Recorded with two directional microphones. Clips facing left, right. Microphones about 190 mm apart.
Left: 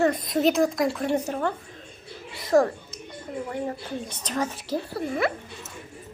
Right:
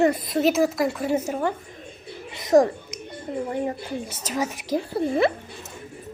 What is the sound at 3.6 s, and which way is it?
Speech, 5° right (ahead or behind).